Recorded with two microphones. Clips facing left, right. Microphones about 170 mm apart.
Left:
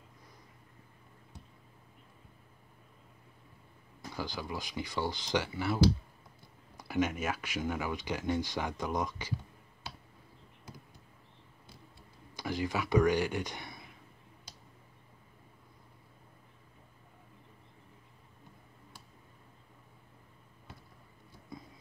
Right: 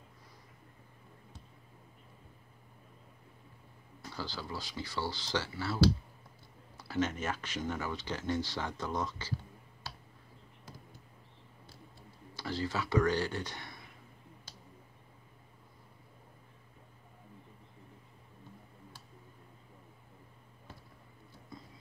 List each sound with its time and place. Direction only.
4.1 s speech: 15° left (ahead or behind)
12.4 s speech: 15° left (ahead or behind)